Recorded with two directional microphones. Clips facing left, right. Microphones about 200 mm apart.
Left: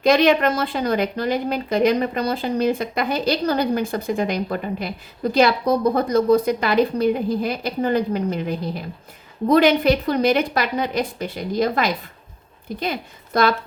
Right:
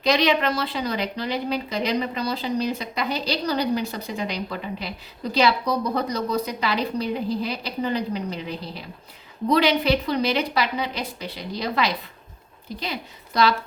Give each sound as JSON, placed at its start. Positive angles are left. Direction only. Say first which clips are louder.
{"t": 0.0, "sound": "a woman's voice", "louder": "left 5 dB", "side_deg": 50}